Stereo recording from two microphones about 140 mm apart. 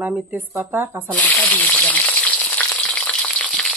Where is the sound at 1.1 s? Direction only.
10° left (ahead or behind).